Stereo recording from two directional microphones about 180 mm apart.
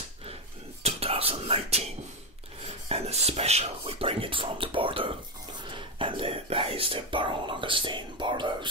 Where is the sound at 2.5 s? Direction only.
35° right (ahead or behind).